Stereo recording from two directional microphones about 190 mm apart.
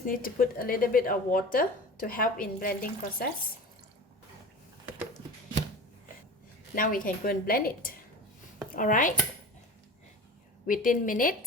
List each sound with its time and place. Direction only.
0.0 s a woman's voice: 50° left (ahead or behind)
6.7 s a woman's voice: 45° left (ahead or behind)
10.7 s a woman's voice: 45° left (ahead or behind)